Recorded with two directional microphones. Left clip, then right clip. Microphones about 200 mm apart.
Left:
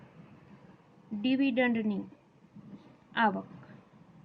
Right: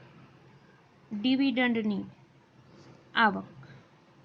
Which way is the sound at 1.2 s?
20° left (ahead or behind).